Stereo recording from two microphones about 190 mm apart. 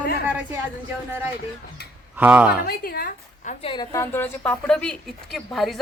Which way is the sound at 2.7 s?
50° left (ahead or behind).